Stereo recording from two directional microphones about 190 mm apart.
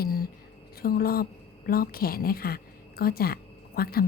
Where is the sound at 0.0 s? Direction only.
50° left (ahead or behind).